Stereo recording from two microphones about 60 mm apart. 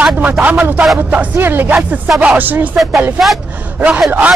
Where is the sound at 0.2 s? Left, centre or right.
Right.